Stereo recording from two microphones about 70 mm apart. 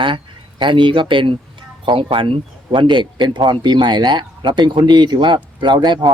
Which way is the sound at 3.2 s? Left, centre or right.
Right.